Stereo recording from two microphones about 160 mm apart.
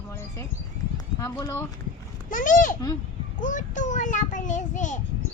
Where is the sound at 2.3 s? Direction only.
55° left (ahead or behind).